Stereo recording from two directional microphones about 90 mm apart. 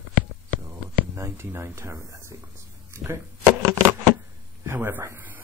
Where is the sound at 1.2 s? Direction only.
25° right (ahead or behind).